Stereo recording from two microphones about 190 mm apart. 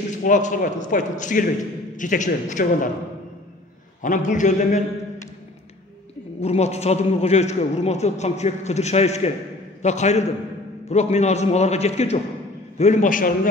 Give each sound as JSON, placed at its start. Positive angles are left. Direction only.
{"t": 0.2, "sound": "a man's voice", "side_deg": 40}
{"t": 4.0, "sound": "a man's voice", "side_deg": 40}
{"t": 6.4, "sound": "a man's voice", "side_deg": 35}